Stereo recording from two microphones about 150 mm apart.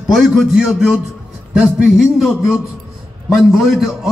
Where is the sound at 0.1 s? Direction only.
5° right (ahead or behind).